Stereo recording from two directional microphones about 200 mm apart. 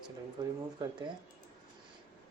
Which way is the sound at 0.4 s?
20° right (ahead or behind).